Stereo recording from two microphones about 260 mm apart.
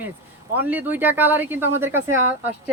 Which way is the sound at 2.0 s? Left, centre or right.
Right.